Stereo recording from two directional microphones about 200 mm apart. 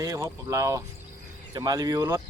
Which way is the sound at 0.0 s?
15° right (ahead or behind).